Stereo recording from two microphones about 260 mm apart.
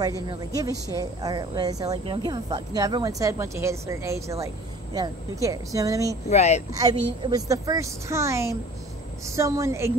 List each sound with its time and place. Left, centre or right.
0.0 s speech: centre
6.2 s speech: left
6.7 s speech: centre